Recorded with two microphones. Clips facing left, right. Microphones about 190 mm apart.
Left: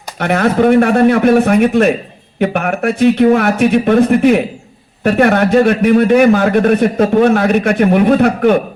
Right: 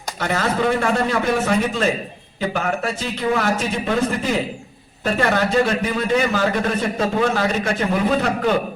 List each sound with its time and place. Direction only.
0.2 s a man's voice: 60° left (ahead or behind)